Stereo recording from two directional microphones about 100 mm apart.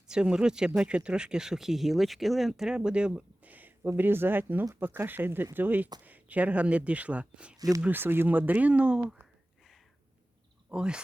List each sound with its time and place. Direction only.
0.1 s speech: 10° right (ahead or behind)
7.5 s speech: 35° right (ahead or behind)
7.8 s speech: 20° right (ahead or behind)
10.7 s speech: 10° right (ahead or behind)